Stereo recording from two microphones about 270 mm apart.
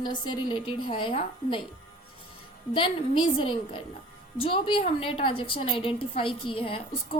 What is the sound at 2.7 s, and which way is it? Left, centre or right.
A woman's voice, centre.